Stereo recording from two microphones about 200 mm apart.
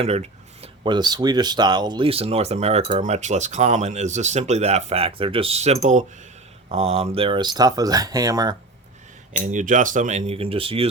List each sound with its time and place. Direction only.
0.0 s speech: 30° right (ahead or behind)
9.4 s speech: 40° right (ahead or behind)